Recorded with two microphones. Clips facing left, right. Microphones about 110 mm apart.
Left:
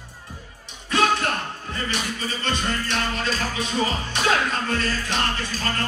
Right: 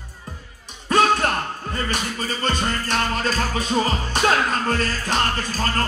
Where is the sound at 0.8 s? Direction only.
45° right (ahead or behind).